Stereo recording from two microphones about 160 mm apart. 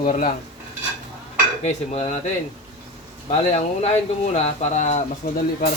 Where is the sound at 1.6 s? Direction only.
45° left (ahead or behind).